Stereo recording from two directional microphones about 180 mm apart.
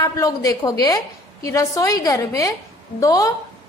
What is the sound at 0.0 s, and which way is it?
A woman's voice, 20° left (ahead or behind).